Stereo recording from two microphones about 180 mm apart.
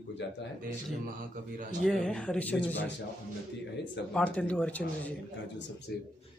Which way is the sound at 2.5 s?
85° left.